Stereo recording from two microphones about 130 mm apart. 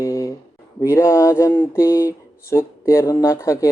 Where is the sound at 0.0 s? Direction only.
25° left (ahead or behind).